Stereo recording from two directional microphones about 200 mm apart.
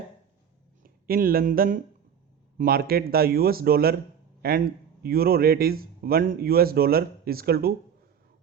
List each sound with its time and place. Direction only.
0.8 s a man's voice: 45° right (ahead or behind)